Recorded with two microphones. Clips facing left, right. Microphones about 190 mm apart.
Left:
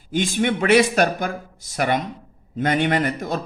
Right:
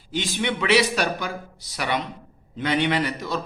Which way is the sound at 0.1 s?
50° left (ahead or behind).